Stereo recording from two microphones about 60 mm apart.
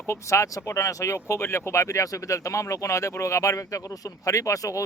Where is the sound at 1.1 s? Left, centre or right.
Left.